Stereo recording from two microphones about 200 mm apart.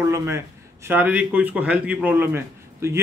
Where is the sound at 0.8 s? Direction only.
10° right (ahead or behind).